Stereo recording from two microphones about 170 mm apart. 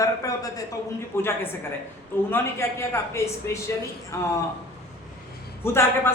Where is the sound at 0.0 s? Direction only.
20° left (ahead or behind).